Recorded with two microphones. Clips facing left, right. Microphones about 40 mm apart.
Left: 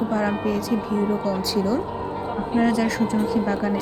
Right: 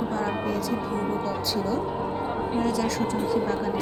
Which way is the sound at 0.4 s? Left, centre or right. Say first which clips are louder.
Left 4 dB; left.